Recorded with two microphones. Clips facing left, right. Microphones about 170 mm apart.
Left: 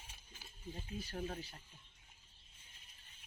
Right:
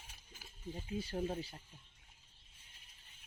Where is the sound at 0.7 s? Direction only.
20° right (ahead or behind).